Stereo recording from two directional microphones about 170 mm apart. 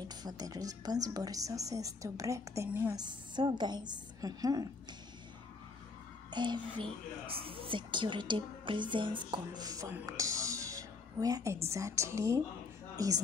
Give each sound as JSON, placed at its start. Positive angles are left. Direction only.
{"t": 0.1, "sound": "a woman's voice", "side_deg": -25}
{"t": 3.0, "sound": "a woman's voice", "side_deg": -25}
{"t": 6.3, "sound": "a woman's voice", "side_deg": -25}